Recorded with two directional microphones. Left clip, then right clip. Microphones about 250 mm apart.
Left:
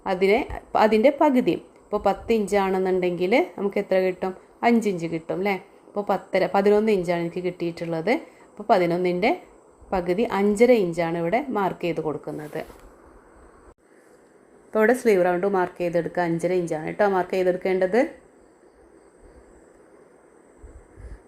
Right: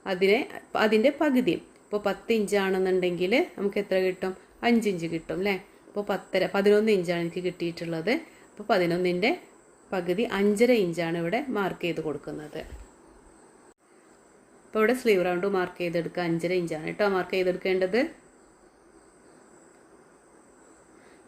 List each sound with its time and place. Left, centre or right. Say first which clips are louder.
0.0 s a woman's voice: left 3 dB; centre
12.5 s a woman's voice: left 8 dB; centre
14.7 s a woman's voice: left 4 dB; centre